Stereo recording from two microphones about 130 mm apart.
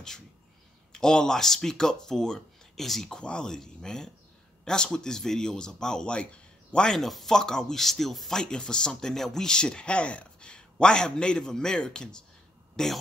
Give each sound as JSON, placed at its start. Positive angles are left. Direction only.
{"t": 0.9, "sound": "speech", "side_deg": 5}